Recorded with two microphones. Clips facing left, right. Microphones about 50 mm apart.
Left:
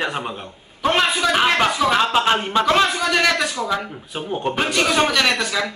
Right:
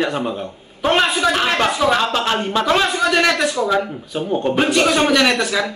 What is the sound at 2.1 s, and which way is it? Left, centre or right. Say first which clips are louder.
Speech: left 1 dB; centre.